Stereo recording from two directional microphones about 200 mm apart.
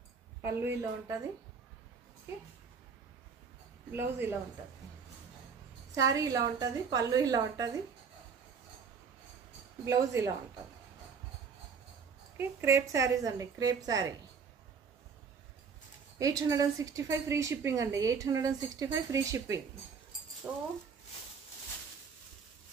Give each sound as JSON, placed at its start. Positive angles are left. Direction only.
{"t": 0.6, "sound": "a woman's voice", "side_deg": -10}
{"t": 3.9, "sound": "a woman's voice", "side_deg": -10}
{"t": 5.9, "sound": "a woman's voice", "side_deg": -15}
{"t": 9.8, "sound": "a woman's voice", "side_deg": -15}
{"t": 12.4, "sound": "a woman's voice", "side_deg": -10}
{"t": 16.2, "sound": "a woman's voice", "side_deg": -15}